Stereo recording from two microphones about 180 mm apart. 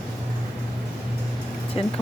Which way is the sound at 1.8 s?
30° left (ahead or behind).